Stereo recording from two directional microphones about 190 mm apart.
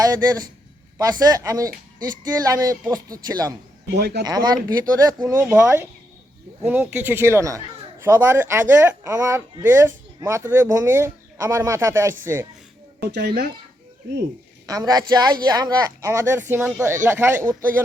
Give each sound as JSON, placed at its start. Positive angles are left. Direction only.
{"t": 0.0, "sound": "speech", "side_deg": -20}
{"t": 3.9, "sound": "a child's voice", "side_deg": -60}
{"t": 4.2, "sound": "speech", "side_deg": -20}
{"t": 13.0, "sound": "a child's voice", "side_deg": -60}
{"t": 14.7, "sound": "speech", "side_deg": -20}